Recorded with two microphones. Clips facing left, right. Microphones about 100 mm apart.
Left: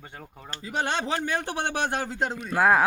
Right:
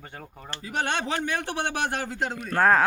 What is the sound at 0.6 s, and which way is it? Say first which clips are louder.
Speech: even; 25° left (ahead or behind).